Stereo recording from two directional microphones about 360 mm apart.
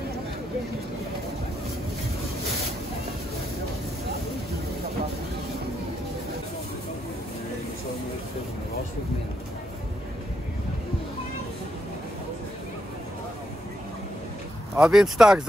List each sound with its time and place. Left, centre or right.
14.8 s speech: centre